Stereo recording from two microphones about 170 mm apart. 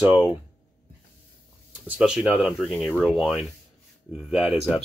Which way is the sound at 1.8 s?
5° right (ahead or behind).